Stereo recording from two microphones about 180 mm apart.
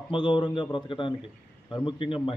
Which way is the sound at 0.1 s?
25° left (ahead or behind).